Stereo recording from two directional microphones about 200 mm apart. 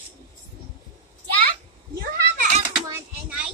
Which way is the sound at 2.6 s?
15° right (ahead or behind).